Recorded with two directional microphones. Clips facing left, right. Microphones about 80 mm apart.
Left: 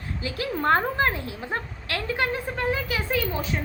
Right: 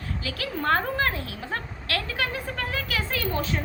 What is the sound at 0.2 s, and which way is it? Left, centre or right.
A woman's voice, left.